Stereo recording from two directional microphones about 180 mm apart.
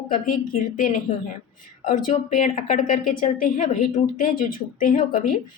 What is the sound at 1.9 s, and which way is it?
Speech, 45° left (ahead or behind).